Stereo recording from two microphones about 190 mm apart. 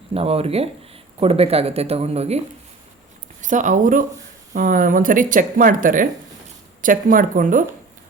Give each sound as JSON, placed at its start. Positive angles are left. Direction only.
{"t": 0.1, "sound": "speech", "side_deg": -30}
{"t": 3.4, "sound": "speech", "side_deg": -40}